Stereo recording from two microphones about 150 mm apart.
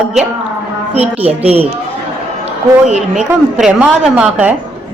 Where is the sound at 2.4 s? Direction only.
50° right (ahead or behind).